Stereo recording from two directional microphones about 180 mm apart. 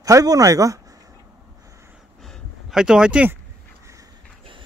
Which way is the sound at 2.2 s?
Centre (ahead or behind).